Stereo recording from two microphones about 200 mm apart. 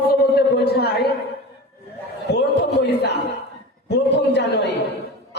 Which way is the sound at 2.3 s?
55° left (ahead or behind).